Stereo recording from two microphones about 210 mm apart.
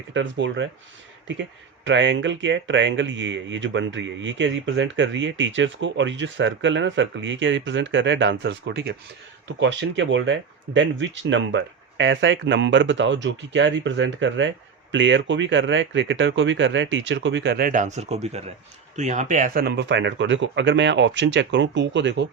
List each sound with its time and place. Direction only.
0.1 s speech: 60° right (ahead or behind)